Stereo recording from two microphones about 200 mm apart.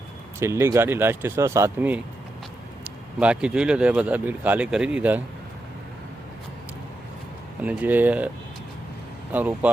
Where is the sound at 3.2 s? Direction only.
5° right (ahead or behind).